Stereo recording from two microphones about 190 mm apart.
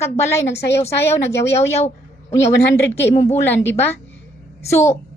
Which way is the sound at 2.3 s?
15° left (ahead or behind).